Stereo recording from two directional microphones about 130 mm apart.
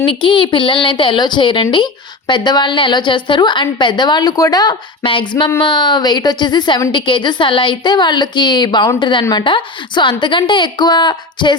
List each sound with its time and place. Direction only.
0.0 s a woman's voice: 40° left (ahead or behind)